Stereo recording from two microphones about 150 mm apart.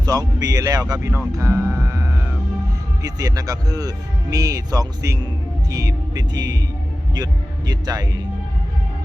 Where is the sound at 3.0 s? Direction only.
25° right (ahead or behind).